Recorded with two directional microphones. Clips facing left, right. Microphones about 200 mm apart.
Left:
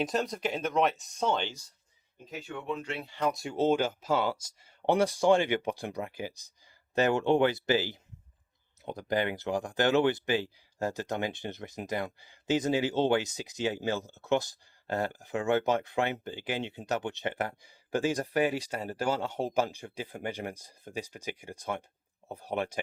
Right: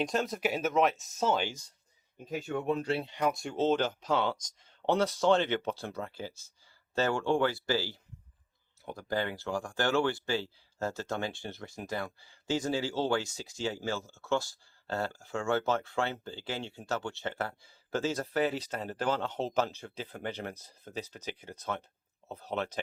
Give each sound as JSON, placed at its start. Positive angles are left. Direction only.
{"t": 0.0, "sound": "speech", "side_deg": 0}
{"t": 2.3, "sound": "speech", "side_deg": -45}
{"t": 3.1, "sound": "speech", "side_deg": -10}
{"t": 3.3, "sound": "speech", "side_deg": 5}